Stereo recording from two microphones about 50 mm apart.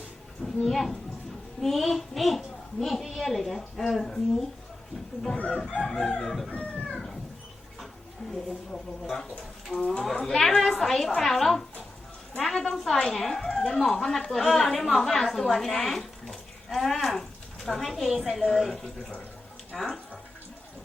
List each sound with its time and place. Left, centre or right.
0.4 s a woman's voice: centre
5.5 s a woman's voice: centre
6.9 s a sound: centre
8.3 s a woman's voice: centre
10.1 s a woman's voice: centre